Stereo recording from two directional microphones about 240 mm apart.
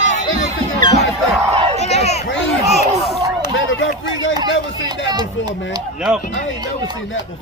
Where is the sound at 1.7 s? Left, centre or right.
Left.